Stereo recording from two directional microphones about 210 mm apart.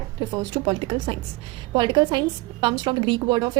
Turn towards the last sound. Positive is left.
turn(degrees=-20)  # may be behind; listen again after turning